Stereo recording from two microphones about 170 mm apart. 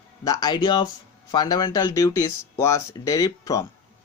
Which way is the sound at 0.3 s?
25° left (ahead or behind).